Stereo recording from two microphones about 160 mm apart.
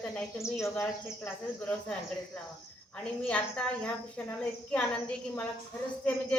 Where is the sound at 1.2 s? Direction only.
5° left (ahead or behind).